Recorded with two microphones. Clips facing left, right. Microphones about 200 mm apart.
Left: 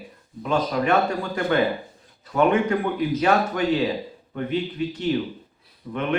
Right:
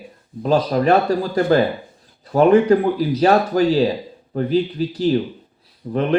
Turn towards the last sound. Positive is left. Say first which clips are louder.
# right 8 dB
turn(degrees=-35)  # may be behind; listen again after turning